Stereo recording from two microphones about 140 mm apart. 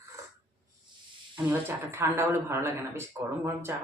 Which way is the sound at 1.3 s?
15° right (ahead or behind).